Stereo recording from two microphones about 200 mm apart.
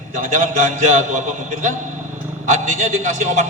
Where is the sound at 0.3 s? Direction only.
40° right (ahead or behind).